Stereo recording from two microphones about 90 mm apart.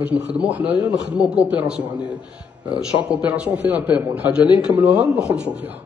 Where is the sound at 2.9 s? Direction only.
15° right (ahead or behind).